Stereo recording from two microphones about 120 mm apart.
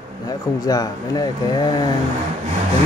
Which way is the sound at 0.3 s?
30° left (ahead or behind).